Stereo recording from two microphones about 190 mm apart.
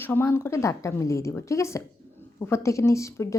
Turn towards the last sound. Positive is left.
turn(degrees=15)  # may be behind; listen again after turning